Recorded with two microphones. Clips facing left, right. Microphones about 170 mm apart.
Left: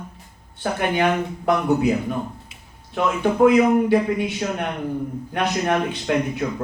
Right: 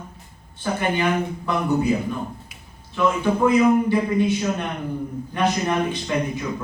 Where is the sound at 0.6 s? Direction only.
65° left (ahead or behind).